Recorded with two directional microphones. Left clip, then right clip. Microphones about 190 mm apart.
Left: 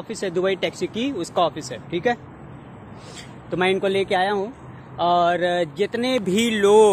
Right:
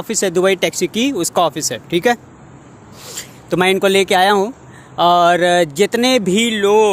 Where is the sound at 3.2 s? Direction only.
55° right (ahead or behind).